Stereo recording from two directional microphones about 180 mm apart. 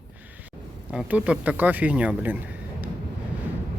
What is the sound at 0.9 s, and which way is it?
Speech, 5° right (ahead or behind).